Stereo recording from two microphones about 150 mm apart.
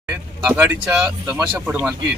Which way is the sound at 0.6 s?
10° right (ahead or behind).